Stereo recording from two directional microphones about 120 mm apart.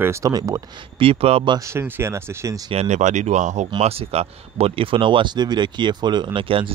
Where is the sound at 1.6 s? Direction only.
20° right (ahead or behind).